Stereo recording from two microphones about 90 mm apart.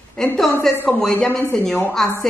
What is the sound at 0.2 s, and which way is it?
A woman's voice, 5° left (ahead or behind).